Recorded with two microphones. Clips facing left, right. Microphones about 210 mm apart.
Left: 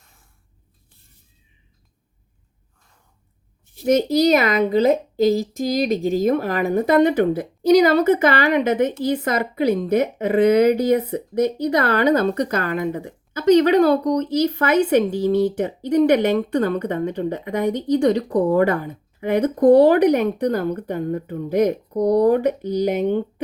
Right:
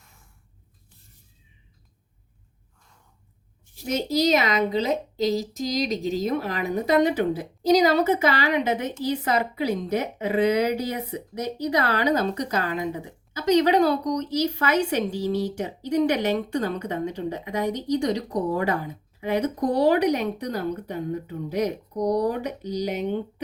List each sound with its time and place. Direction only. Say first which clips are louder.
3.8 s a woman's voice: left 7 dB; 55° left (ahead or behind)